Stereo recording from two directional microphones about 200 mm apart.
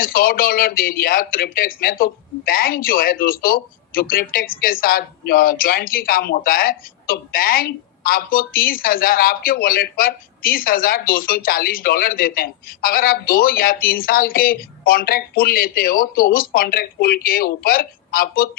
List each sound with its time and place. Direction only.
0.0 s a man's voice: 45° left (ahead or behind)